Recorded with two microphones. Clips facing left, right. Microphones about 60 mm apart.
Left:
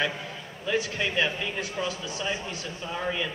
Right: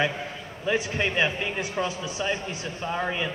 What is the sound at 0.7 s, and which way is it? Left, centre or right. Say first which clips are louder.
A man's voice: right 2 dB; right.